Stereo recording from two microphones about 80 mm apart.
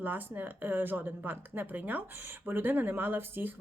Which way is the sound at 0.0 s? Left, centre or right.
Right.